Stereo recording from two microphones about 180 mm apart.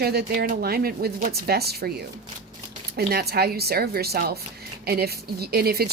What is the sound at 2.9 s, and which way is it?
Speech, 60° right (ahead or behind).